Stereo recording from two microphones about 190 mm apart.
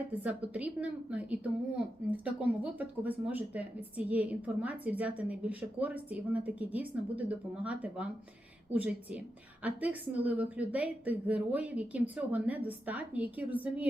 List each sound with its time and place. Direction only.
0.2 s a woman's voice: 10° right (ahead or behind)